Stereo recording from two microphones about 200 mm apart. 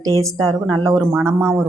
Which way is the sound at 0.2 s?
15° right (ahead or behind).